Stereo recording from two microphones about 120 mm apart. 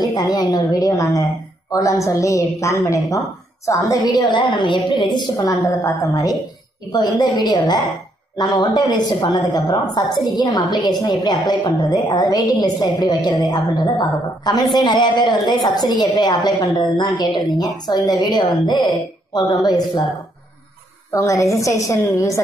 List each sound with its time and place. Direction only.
0.0 s a woman's voice: 35° left (ahead or behind)
5.4 s a woman's voice: 25° left (ahead or behind)
21.1 s speech: 25° left (ahead or behind)